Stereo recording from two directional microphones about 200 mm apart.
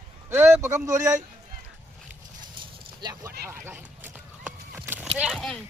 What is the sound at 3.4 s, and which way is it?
Horse, 10° right (ahead or behind).